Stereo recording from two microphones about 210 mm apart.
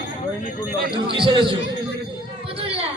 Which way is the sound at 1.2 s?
25° right (ahead or behind).